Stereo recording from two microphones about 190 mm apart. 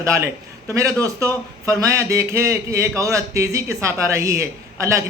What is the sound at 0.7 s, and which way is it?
Speech, 15° right (ahead or behind).